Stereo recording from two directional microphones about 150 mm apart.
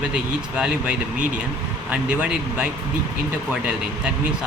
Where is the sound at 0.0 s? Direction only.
5° right (ahead or behind).